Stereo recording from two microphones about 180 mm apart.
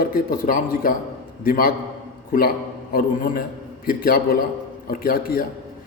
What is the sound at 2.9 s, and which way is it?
A man's voice, 50° left (ahead or behind).